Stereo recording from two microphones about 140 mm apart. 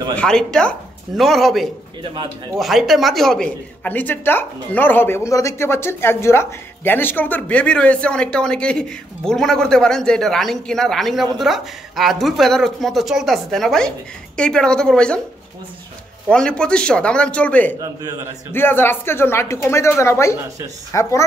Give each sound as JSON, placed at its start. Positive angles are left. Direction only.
{"t": 0.1, "sound": "a woman's voice", "side_deg": 5}
{"t": 16.3, "sound": "speech", "side_deg": 5}